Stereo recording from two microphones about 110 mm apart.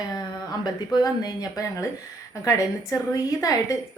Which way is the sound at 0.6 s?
35° left (ahead or behind).